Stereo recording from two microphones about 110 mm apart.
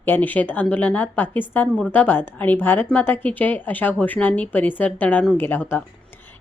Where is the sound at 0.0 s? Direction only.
15° left (ahead or behind).